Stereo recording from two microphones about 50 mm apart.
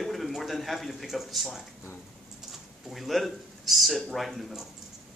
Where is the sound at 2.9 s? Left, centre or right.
Centre.